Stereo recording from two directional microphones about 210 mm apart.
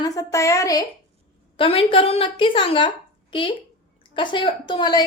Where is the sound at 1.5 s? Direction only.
25° left (ahead or behind).